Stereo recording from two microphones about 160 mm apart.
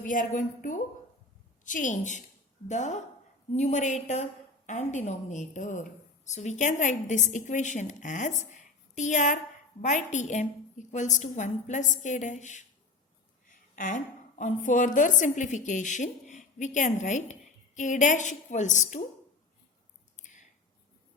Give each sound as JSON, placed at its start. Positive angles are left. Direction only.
{"t": 0.1, "sound": "a woman's voice", "side_deg": 55}
{"t": 13.7, "sound": "a woman's voice", "side_deg": 55}
{"t": 20.1, "sound": "a sound", "side_deg": 50}